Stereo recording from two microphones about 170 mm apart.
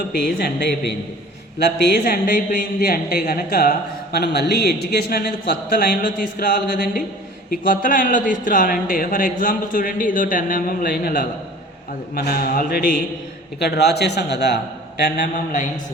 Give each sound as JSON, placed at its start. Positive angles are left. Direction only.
{"t": 0.1, "sound": "a man's voice", "side_deg": 65}
{"t": 13.6, "sound": "a man's voice", "side_deg": 75}